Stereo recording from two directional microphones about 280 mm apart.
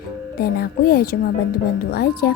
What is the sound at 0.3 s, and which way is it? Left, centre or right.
Speech, left.